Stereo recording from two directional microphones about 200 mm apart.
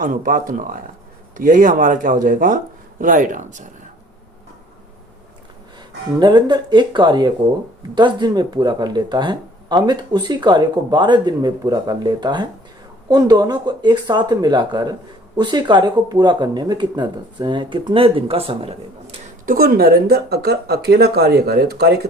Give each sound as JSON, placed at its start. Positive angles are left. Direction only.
{"t": 0.0, "sound": "speech", "side_deg": -40}
{"t": 6.1, "sound": "speech", "side_deg": -20}
{"t": 19.5, "sound": "speech", "side_deg": -50}